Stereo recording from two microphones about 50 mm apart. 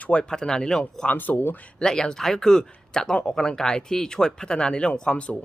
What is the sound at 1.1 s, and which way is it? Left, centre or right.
Speech, left.